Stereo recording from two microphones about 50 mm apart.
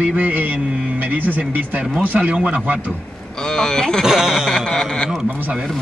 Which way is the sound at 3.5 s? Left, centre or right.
Centre.